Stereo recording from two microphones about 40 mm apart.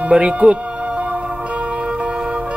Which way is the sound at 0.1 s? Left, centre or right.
Right.